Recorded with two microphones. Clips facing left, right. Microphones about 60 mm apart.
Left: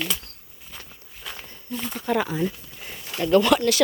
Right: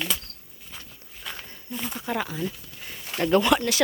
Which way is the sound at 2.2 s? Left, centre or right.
Centre.